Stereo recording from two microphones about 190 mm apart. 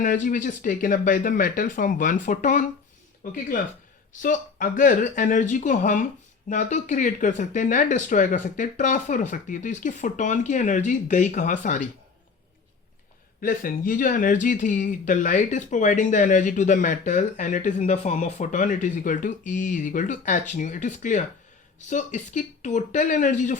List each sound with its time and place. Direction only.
0.0 s speech: 45° left (ahead or behind)
13.4 s speech: 45° left (ahead or behind)